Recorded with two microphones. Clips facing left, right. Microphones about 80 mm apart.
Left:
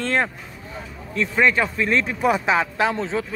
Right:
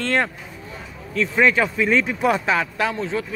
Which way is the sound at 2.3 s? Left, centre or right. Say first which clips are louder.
Left 1 dB; left.